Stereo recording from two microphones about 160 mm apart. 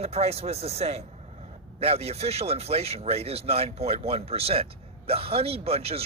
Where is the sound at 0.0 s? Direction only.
40° right (ahead or behind).